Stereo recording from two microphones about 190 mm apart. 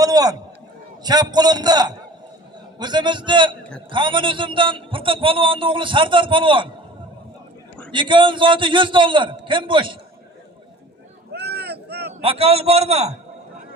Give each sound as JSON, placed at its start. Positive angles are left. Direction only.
{"t": 0.0, "sound": "a man's voice", "side_deg": -20}
{"t": 3.6, "sound": "a sound", "side_deg": 5}
{"t": 3.9, "sound": "a man's voice", "side_deg": -25}
{"t": 7.9, "sound": "a man's voice", "side_deg": -25}
{"t": 11.3, "sound": "boat", "side_deg": -60}
{"t": 12.2, "sound": "a man's voice", "side_deg": -30}